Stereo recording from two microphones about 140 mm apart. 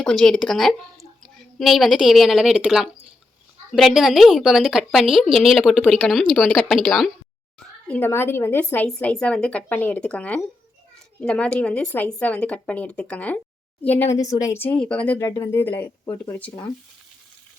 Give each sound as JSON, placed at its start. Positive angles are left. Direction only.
{"t": 0.0, "sound": "a woman's voice", "side_deg": 5}
{"t": 7.9, "sound": "speech", "side_deg": 15}
{"t": 15.2, "sound": "speech", "side_deg": 20}